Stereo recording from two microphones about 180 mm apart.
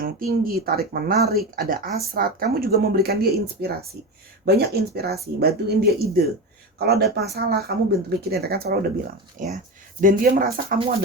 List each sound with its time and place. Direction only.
0.0 s speech: 55° right (ahead or behind)
9.4 s speech: 45° right (ahead or behind)